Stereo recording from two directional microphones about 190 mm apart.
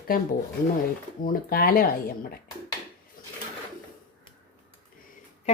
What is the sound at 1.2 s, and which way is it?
Speech, 50° left (ahead or behind).